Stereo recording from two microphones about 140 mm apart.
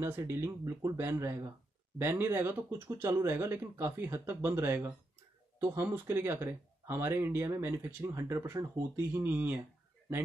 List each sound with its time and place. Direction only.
0.0 s speech: 20° right (ahead or behind)